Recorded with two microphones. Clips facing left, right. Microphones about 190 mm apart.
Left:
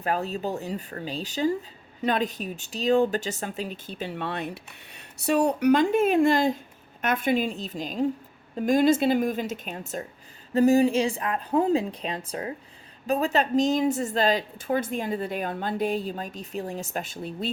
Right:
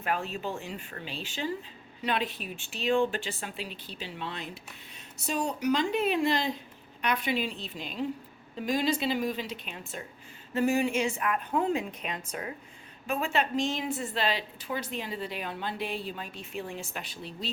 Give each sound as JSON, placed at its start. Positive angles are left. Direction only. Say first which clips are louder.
{"t": 0.0, "sound": "a woman's voice", "louder": "left 5 dB", "side_deg": 35}